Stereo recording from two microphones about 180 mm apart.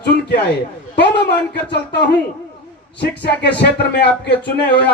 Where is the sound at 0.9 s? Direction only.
70° left (ahead or behind).